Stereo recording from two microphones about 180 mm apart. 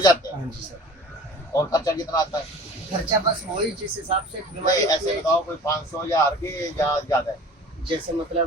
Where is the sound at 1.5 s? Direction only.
20° left (ahead or behind).